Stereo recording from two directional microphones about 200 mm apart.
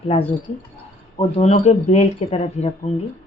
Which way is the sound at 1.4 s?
35° left (ahead or behind).